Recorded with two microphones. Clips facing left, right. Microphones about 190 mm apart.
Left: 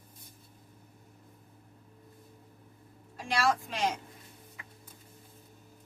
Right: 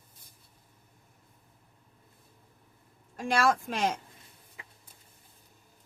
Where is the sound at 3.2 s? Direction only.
50° right (ahead or behind).